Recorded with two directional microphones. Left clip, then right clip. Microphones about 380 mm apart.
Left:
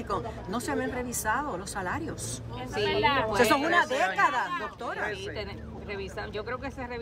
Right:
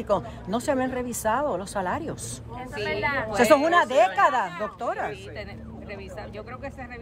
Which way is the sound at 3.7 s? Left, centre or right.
Right.